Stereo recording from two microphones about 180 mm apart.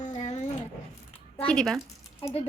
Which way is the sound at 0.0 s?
40° left (ahead or behind).